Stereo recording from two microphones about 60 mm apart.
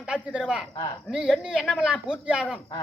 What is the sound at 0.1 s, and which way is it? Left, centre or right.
A man's voice, centre.